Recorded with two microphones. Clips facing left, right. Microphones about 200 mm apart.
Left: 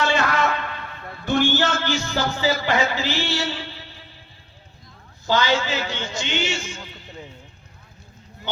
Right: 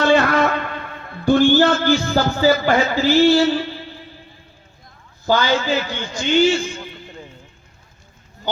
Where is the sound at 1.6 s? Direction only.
55° right (ahead or behind).